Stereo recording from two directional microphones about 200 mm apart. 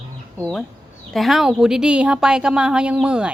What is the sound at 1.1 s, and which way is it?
A woman's voice, centre (ahead or behind).